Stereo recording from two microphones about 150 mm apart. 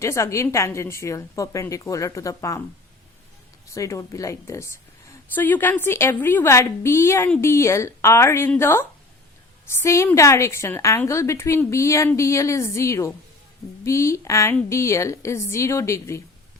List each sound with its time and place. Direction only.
0.0 s a woman's voice: 20° left (ahead or behind)
3.7 s a woman's voice: 20° left (ahead or behind)